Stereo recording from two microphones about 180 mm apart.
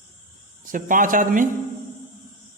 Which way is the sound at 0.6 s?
50° right (ahead or behind).